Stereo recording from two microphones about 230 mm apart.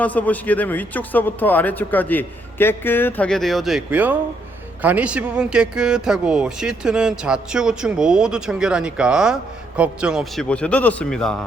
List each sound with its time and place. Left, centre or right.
0.0 s speech: centre